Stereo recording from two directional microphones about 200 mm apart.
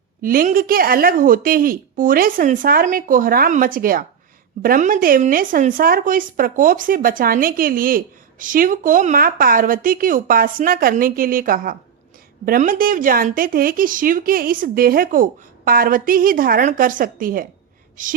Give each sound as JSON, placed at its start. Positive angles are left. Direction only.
{"t": 0.2, "sound": "speech", "side_deg": -45}